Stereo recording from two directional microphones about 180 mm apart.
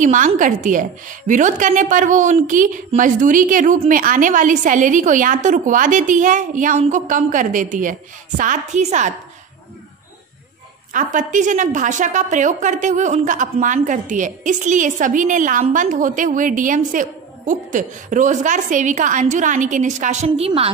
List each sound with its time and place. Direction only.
0.0 s a woman's voice: 45° right (ahead or behind)
10.9 s a woman's voice: 45° right (ahead or behind)